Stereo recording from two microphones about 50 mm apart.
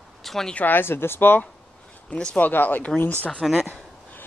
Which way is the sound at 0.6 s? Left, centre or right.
Left.